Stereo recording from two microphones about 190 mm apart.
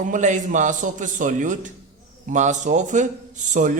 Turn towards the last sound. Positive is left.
turn(degrees=-40)  # may be behind; listen again after turning